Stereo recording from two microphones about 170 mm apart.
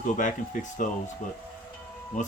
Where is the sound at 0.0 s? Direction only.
50° left (ahead or behind).